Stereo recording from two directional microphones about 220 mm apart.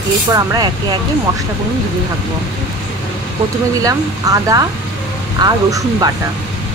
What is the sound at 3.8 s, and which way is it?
Speech, 15° right (ahead or behind).